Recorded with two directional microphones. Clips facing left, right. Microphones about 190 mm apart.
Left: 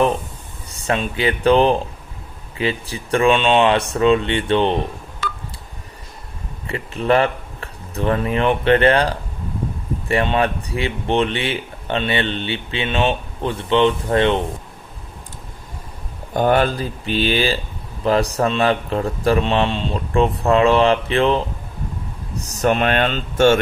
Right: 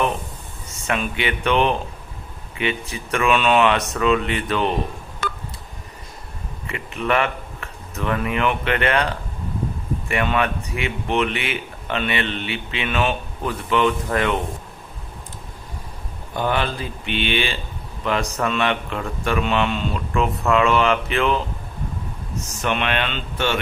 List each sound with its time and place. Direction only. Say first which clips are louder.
0.7 s speech: left 3 dB; 35° left (ahead or behind)
6.7 s speech: left 5 dB; 35° left (ahead or behind)
16.3 s speech: left 6 dB; 45° left (ahead or behind)